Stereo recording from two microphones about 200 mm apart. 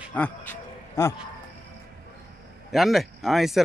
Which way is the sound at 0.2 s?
5° left (ahead or behind).